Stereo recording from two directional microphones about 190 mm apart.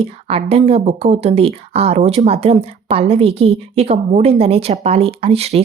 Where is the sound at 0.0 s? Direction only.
30° right (ahead or behind).